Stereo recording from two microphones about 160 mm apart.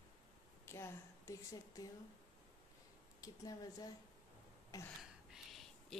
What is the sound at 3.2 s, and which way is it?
Speech, 20° left (ahead or behind).